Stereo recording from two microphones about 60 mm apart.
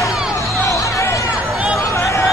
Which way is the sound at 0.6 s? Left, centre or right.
Left.